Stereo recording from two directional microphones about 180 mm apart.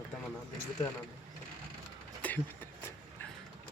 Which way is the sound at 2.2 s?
10° left (ahead or behind).